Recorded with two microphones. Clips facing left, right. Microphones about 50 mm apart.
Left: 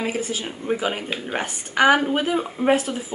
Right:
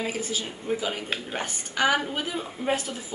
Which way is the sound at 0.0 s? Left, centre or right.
Left.